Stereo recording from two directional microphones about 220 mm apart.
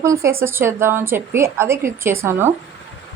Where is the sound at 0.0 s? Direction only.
15° right (ahead or behind).